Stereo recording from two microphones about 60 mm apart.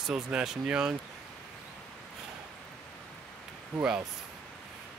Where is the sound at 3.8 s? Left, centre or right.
Right.